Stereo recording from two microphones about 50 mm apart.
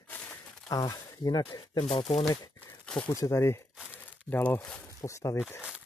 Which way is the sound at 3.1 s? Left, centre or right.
Left.